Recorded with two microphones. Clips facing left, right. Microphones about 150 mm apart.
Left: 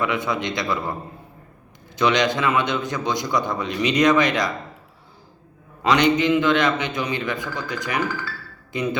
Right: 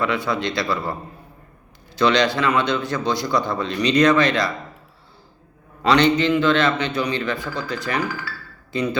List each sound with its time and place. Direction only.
0.0 s a man's voice: 20° left (ahead or behind)
2.0 s a man's voice: 15° left (ahead or behind)
5.8 s a man's voice: 15° left (ahead or behind)